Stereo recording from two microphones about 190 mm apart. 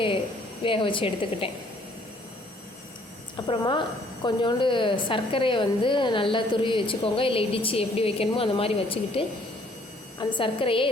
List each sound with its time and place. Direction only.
0.6 s a woman's voice: 25° left (ahead or behind)
3.4 s a woman's voice: 25° left (ahead or behind)